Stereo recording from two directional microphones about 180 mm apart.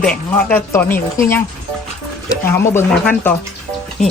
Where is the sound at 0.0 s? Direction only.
5° left (ahead or behind).